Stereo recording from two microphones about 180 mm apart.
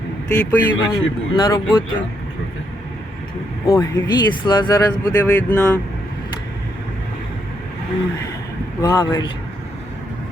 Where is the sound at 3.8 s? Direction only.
25° left (ahead or behind).